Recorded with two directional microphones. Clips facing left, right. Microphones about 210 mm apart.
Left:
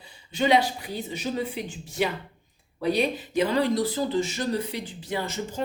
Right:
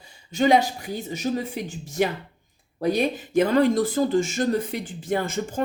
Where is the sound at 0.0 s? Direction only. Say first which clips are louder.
Right 4 dB; 45° right (ahead or behind).